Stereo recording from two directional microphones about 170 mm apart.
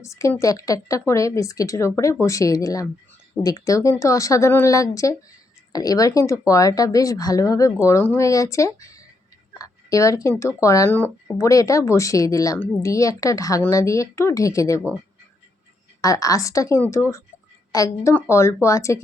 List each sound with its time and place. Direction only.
0.0 s speech: 15° left (ahead or behind)
16.0 s speech: 20° left (ahead or behind)